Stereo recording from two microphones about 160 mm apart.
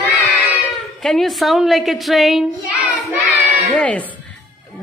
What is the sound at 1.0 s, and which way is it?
A woman's voice, centre (ahead or behind).